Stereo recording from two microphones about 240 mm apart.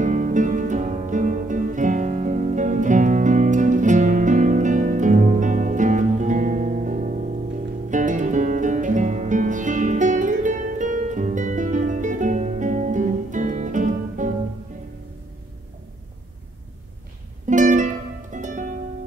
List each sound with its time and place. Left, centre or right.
0.0 s music: right
17.5 s music: right